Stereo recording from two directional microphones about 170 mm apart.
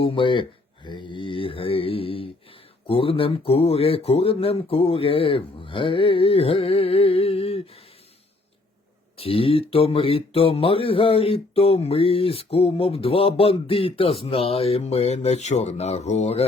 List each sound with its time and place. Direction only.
0.0 s speech: 30° left (ahead or behind)
9.1 s speech: 35° left (ahead or behind)